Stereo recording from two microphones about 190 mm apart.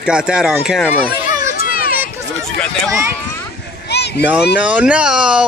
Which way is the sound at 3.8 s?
60° left (ahead or behind).